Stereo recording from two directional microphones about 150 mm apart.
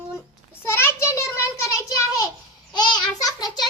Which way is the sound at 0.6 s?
15° left (ahead or behind).